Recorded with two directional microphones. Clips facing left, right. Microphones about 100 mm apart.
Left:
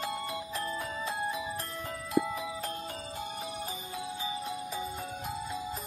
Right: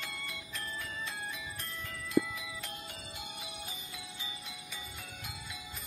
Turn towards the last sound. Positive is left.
turn(degrees=35)  # may be behind; listen again after turning